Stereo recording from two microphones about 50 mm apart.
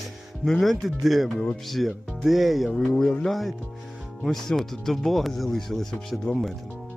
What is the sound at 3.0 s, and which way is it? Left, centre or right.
Speech, centre.